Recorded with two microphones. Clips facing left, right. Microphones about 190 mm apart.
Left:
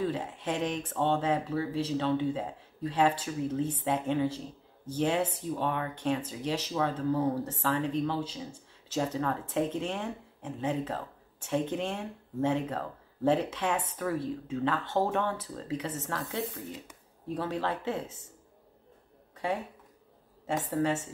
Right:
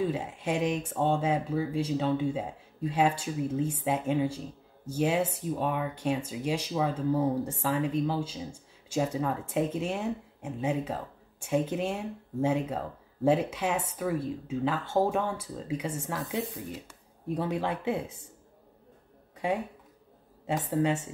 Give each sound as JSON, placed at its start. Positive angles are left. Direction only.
{"t": 0.0, "sound": "speech", "side_deg": -10}
{"t": 17.3, "sound": "speech", "side_deg": -15}
{"t": 20.7, "sound": "speech", "side_deg": -15}